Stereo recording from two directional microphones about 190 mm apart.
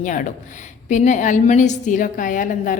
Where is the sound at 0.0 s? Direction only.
40° left (ahead or behind).